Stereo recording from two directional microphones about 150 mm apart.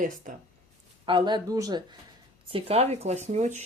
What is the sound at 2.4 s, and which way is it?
A woman's voice, 40° right (ahead or behind).